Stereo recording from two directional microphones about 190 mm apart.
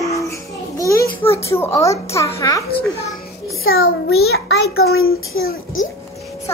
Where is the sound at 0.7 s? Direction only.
15° left (ahead or behind).